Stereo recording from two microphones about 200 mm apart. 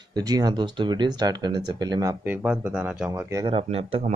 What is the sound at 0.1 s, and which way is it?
Speech, 20° right (ahead or behind).